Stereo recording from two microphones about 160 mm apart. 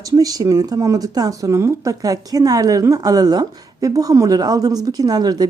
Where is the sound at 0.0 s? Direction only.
20° right (ahead or behind).